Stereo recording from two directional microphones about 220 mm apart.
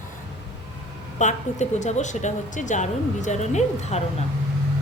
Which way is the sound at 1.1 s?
30° left (ahead or behind).